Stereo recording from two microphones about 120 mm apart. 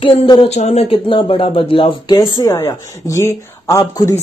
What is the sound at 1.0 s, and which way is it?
Speech, 45° left (ahead or behind).